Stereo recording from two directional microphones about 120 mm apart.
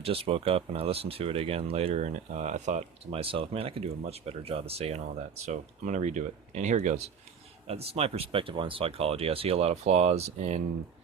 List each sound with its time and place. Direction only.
0.0 s speech: 50° right (ahead or behind); by 2.8 s 75° right (ahead or behind)
3.1 s speech: 50° right (ahead or behind)
5.5 s speech: 80° right
7.7 s speech: 60° right (ahead or behind)